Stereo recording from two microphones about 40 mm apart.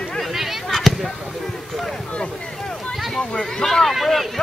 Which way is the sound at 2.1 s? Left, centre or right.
Left.